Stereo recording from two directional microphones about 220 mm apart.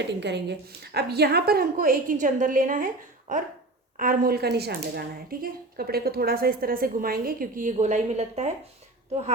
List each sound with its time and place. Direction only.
0.2 s a woman's voice: 50° right (ahead or behind); by 8.5 s 30° right (ahead or behind)